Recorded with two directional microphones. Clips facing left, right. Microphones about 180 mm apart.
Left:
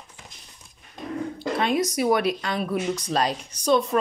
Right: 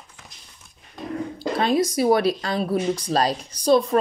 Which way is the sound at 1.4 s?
35° right (ahead or behind).